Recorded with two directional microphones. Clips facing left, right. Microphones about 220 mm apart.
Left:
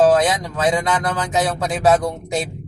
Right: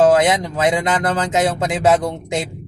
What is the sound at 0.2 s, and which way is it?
Speech, 20° right (ahead or behind).